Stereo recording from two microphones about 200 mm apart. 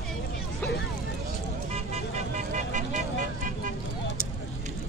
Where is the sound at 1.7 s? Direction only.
30° right (ahead or behind).